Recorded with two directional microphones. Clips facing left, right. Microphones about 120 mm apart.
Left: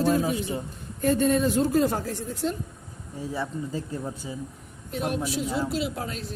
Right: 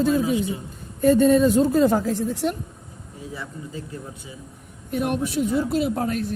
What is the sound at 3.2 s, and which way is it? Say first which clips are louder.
Speech: left 5 dB; 35° left (ahead or behind).